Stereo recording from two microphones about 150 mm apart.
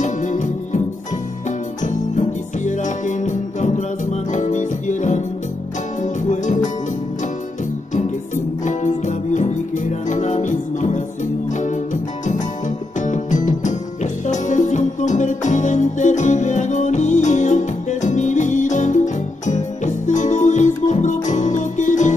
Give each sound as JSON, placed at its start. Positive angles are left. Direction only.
{"t": 0.0, "sound": "music", "side_deg": 55}
{"t": 1.9, "sound": "music", "side_deg": 55}
{"t": 6.2, "sound": "music", "side_deg": 55}
{"t": 8.6, "sound": "music", "side_deg": 55}